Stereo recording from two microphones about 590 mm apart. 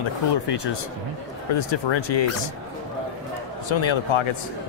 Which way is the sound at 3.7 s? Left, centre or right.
Left.